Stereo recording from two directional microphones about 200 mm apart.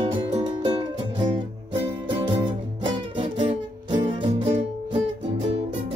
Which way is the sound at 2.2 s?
25° right (ahead or behind).